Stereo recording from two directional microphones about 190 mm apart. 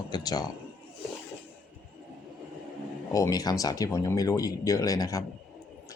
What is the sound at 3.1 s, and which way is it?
Speech, 20° left (ahead or behind).